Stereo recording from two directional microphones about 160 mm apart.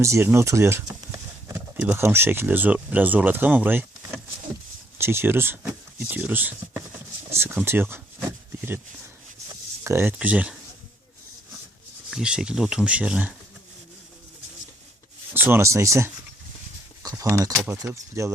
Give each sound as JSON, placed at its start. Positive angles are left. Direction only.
{"t": 0.0, "sound": "speech", "side_deg": -15}
{"t": 9.8, "sound": "speech", "side_deg": -15}
{"t": 12.1, "sound": "speech", "side_deg": -5}
{"t": 15.3, "sound": "speech", "side_deg": -15}
{"t": 17.0, "sound": "a sound", "side_deg": -20}
{"t": 17.7, "sound": "speech", "side_deg": -15}